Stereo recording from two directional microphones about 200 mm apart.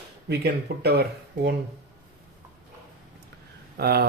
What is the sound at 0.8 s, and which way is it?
Speech, 55° right (ahead or behind).